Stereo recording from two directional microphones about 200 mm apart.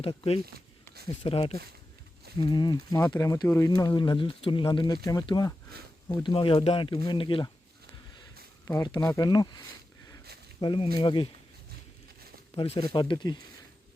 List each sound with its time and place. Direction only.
0.0 s speech: 30° left (ahead or behind)
8.6 s speech: 15° left (ahead or behind)
10.6 s speech: 25° left (ahead or behind)
12.5 s speech: 30° left (ahead or behind)